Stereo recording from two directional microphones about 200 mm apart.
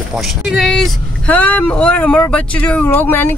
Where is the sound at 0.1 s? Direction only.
Centre (ahead or behind).